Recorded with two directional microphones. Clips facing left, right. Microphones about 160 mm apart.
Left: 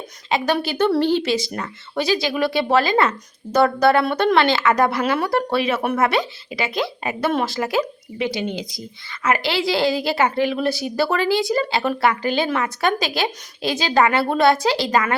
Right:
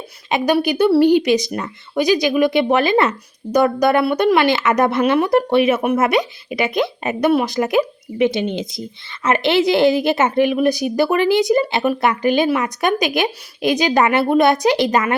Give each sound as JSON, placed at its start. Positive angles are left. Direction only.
{"t": 0.3, "sound": "a woman's voice", "side_deg": -15}